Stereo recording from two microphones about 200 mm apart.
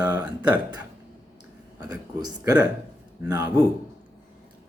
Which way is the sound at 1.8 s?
20° right (ahead or behind).